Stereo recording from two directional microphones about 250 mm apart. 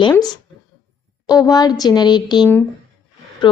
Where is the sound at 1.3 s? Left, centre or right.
Centre.